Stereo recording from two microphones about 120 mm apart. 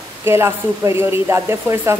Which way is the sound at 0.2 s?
20° right (ahead or behind).